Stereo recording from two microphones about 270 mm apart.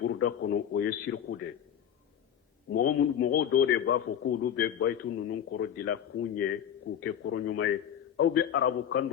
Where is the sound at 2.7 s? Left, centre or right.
Left.